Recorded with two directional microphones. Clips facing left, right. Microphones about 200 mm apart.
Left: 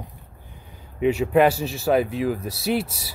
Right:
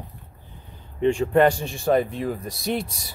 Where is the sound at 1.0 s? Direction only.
5° left (ahead or behind).